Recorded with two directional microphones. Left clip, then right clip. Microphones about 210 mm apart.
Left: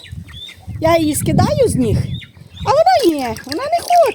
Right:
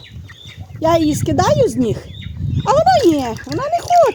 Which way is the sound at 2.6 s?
25° left (ahead or behind).